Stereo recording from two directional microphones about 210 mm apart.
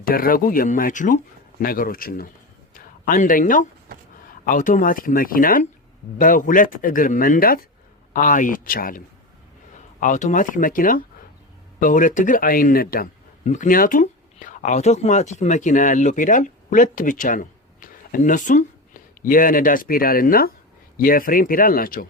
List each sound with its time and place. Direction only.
0.0 s a man's voice: 45° left (ahead or behind)